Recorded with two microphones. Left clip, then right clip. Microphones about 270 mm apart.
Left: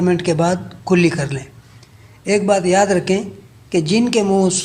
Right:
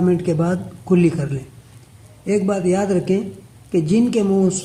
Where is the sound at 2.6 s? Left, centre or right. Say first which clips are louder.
Left 5 dB; centre.